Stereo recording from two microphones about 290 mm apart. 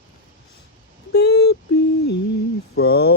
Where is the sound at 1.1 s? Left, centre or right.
Left.